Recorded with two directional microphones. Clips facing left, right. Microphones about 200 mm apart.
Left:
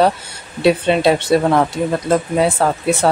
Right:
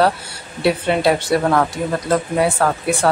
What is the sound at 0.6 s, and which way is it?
Speech, 20° left (ahead or behind).